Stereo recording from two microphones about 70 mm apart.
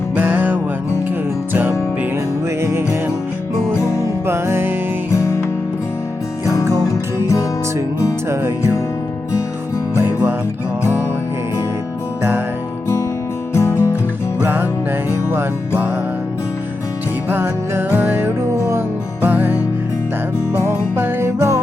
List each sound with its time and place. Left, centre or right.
0.2 s music: right
2.6 s music: right
4.3 s music: right
5.1 s music: left
6.4 s music: left
8.3 s music: right
9.9 s music: right
13.5 s music: left
14.4 s music: right
17.2 s music: right
18.3 s music: right
19.2 s music: right
20.7 s music: right